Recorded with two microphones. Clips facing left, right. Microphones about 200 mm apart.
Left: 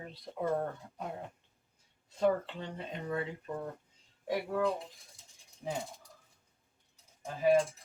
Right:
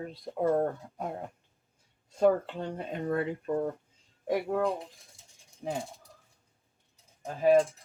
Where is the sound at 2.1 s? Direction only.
45° right (ahead or behind).